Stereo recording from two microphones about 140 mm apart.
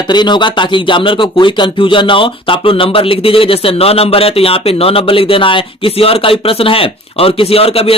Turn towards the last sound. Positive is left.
turn(degrees=45)  # may be behind; listen again after turning